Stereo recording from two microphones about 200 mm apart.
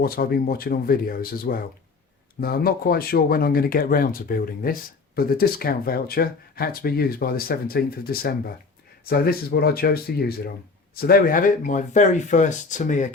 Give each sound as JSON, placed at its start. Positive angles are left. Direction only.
{"t": 0.0, "sound": "speech", "side_deg": 50}